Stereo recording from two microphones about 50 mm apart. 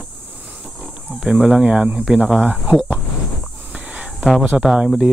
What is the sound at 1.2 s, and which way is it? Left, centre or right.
Speech, centre.